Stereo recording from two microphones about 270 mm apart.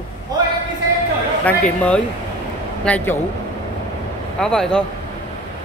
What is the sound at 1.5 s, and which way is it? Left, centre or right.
A man's voice, centre.